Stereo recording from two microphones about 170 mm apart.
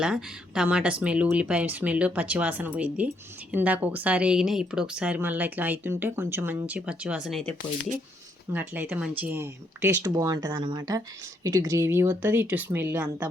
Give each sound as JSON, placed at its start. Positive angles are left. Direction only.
{"t": 0.0, "sound": "speech", "side_deg": -5}
{"t": 8.5, "sound": "speech", "side_deg": -10}